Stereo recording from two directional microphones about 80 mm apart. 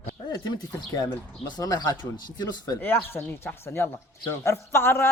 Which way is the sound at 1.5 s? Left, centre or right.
Left.